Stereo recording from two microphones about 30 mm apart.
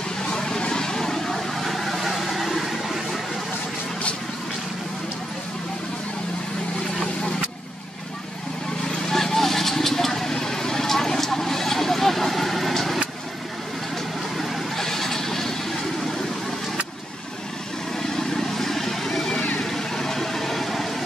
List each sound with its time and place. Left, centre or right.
0.3 s a sound: left
1.3 s vehicle: centre
8.8 s vehicle: centre
14.3 s vehicle: centre
14.8 s vehicle: centre
18.6 s vehicle: centre